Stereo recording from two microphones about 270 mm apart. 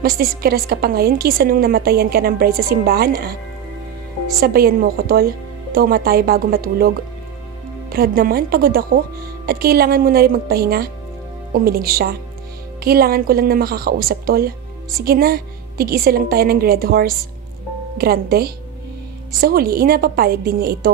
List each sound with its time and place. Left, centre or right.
0.0 s a woman's voice: right
4.4 s a woman's voice: right
7.9 s a woman's voice: right